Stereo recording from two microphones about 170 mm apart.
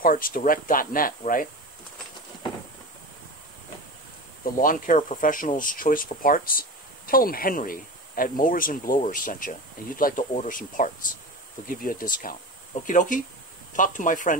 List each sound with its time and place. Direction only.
0.0 s speech: 55° left (ahead or behind)
4.6 s speech: 50° left (ahead or behind)